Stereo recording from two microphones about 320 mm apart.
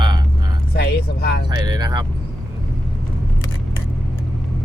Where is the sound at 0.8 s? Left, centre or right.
Left.